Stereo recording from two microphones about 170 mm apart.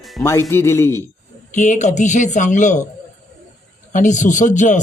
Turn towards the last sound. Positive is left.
turn(degrees=45)  # may be behind; listen again after turning